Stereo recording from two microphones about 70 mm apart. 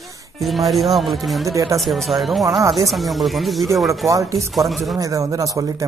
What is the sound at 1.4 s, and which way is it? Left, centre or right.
Speech, right.